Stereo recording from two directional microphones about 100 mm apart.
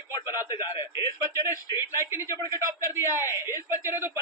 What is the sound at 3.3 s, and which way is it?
Speech, 25° right (ahead or behind).